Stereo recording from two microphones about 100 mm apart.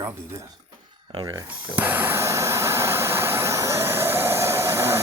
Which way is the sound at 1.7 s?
20° right (ahead or behind).